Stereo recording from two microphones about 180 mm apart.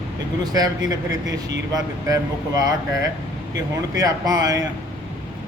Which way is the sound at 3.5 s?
20° right (ahead or behind).